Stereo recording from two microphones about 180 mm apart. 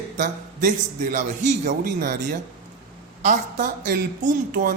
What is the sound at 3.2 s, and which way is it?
Speech, 45° right (ahead or behind).